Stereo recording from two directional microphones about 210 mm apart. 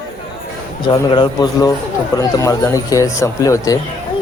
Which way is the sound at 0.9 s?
20° left (ahead or behind).